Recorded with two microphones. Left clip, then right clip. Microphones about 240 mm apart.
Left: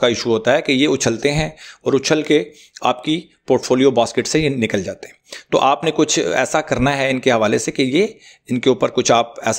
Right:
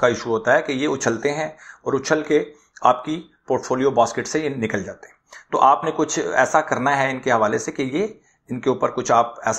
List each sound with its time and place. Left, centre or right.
0.0 s speech: left